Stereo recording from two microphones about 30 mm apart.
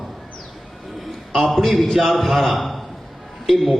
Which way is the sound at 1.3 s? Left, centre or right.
Centre.